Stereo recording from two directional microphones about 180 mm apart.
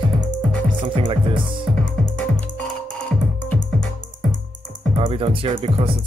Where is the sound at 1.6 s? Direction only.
5° left (ahead or behind).